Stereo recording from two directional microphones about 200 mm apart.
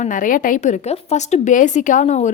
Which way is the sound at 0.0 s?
40° left (ahead or behind).